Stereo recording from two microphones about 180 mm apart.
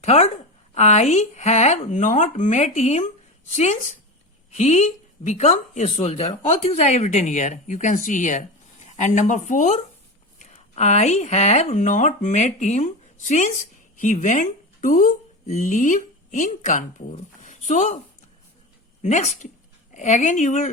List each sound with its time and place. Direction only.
0.0 s a woman's voice: 40° left (ahead or behind)
19.0 s a woman's voice: 40° left (ahead or behind)